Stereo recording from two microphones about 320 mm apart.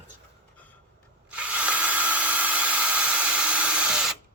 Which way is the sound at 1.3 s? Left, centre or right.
Centre.